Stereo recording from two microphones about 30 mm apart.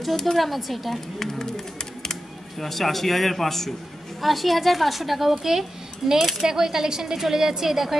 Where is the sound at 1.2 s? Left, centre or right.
Centre.